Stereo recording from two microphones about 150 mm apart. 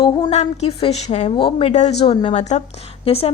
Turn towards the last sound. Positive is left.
turn(degrees=40)  # may be behind; listen again after turning